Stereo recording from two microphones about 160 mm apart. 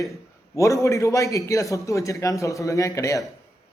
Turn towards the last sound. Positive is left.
turn(degrees=20)  # may be behind; listen again after turning